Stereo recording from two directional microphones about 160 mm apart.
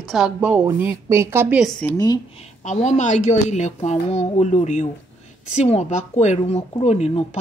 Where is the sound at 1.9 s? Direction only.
20° left (ahead or behind).